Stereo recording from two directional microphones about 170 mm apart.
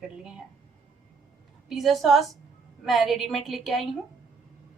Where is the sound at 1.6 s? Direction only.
Centre (ahead or behind).